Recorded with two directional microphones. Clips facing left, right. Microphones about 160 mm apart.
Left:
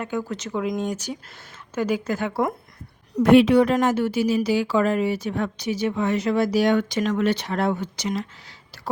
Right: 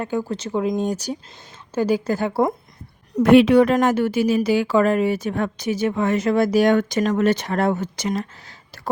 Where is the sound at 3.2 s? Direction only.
65° right (ahead or behind).